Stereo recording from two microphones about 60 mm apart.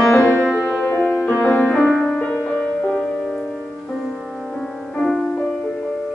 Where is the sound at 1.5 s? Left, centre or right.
Centre.